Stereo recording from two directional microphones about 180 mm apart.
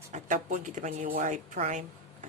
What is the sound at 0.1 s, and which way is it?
A woman's voice, 45° right (ahead or behind).